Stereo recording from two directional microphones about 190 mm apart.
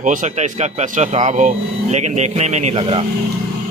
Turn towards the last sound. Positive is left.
turn(degrees=-30)  # may be behind; listen again after turning